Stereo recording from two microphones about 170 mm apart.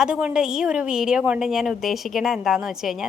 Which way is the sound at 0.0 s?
5° right (ahead or behind).